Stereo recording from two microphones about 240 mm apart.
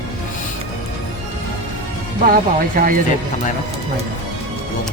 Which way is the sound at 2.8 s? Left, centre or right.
Right.